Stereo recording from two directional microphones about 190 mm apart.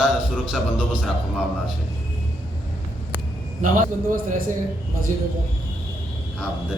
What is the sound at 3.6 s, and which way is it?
Speech, 45° right (ahead or behind).